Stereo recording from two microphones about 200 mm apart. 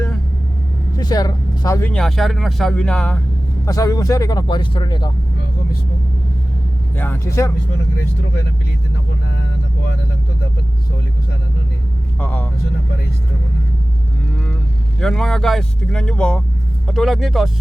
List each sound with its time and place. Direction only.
0.9 s speech: 20° left (ahead or behind)
3.7 s speech: 15° left (ahead or behind)
6.9 s speech: 10° left (ahead or behind)
12.2 s speech: 5° left (ahead or behind)
15.0 s speech: centre (ahead or behind)